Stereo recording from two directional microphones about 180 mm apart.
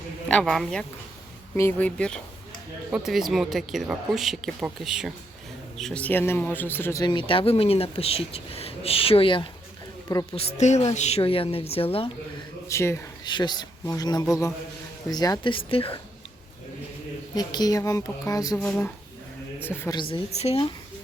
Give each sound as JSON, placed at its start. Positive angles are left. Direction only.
{"t": 0.3, "sound": "a man's voice", "side_deg": 5}
{"t": 7.0, "sound": "speech", "side_deg": 25}
{"t": 12.6, "sound": "speech", "side_deg": 15}
{"t": 17.3, "sound": "speech", "side_deg": 20}
{"t": 18.6, "sound": "a man's voice", "side_deg": 5}
{"t": 20.0, "sound": "speech", "side_deg": 30}